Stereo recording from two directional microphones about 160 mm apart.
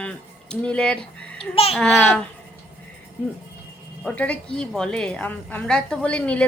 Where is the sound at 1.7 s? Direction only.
5° left (ahead or behind).